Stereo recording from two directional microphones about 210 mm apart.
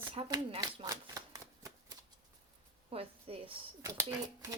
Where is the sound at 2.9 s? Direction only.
25° right (ahead or behind).